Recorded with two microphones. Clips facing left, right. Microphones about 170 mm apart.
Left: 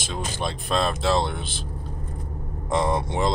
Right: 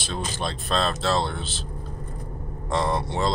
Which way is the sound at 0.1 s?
15° left (ahead or behind).